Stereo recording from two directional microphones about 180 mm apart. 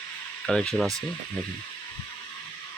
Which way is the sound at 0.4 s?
5° left (ahead or behind).